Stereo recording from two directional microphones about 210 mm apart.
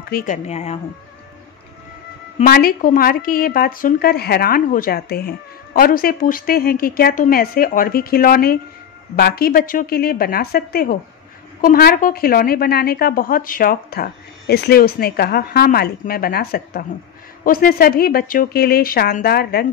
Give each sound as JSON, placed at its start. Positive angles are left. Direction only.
{"t": 0.1, "sound": "speech", "side_deg": 40}
{"t": 2.3, "sound": "a woman's voice", "side_deg": 45}